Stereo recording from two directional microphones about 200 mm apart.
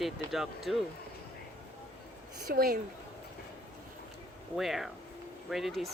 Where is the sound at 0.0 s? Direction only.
Centre (ahead or behind).